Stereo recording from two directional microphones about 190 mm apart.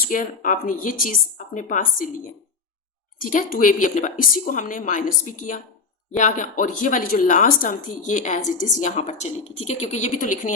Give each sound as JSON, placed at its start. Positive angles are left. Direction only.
{"t": 0.0, "sound": "a woman's voice", "side_deg": 45}
{"t": 3.2, "sound": "a woman's voice", "side_deg": 45}